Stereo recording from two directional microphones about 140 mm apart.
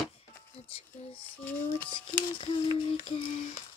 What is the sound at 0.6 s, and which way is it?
Speech, 45° left (ahead or behind).